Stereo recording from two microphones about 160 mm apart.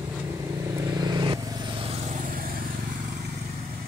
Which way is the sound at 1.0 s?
25° right (ahead or behind).